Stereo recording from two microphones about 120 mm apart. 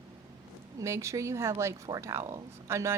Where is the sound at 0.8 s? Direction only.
25° right (ahead or behind).